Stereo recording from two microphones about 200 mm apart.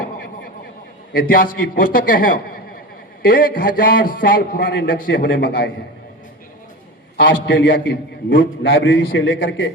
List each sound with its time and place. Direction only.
1.1 s a man's voice: 45° left (ahead or behind)
3.2 s a man's voice: 45° left (ahead or behind)
7.2 s a man's voice: 60° left (ahead or behind)